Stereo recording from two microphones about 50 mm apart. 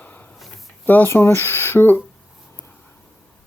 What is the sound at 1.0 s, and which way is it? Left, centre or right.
Speech, left.